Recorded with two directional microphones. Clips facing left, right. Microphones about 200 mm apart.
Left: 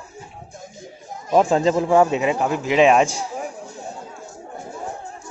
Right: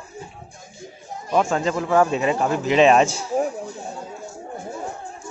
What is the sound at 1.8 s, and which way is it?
Speech, 15° left (ahead or behind).